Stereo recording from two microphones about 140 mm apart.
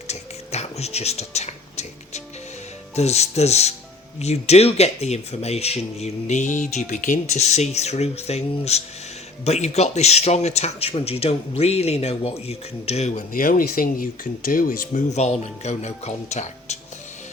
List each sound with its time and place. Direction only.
0.1 s a sound: 50° left (ahead or behind)
2.9 s speech: 50° left (ahead or behind); by 15.0 s 85° left
15.1 s speech: 50° left (ahead or behind)